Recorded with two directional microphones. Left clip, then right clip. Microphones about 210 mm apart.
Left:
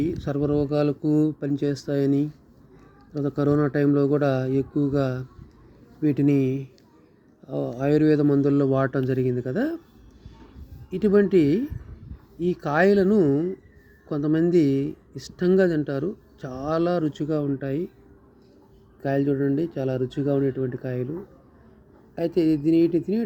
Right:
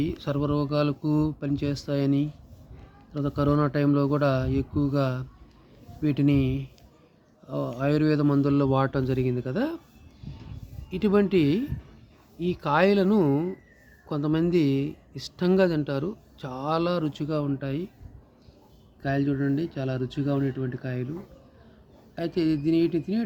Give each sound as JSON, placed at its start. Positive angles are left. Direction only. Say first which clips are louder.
{"t": 0.0, "sound": "speech", "louder": "left 3 dB", "side_deg": -5}
{"t": 10.8, "sound": "speech", "louder": "left 4 dB", "side_deg": 0}
{"t": 19.0, "sound": "speech", "louder": "left 4 dB", "side_deg": 10}
{"t": 22.1, "sound": "speech", "louder": "left 4 dB", "side_deg": 5}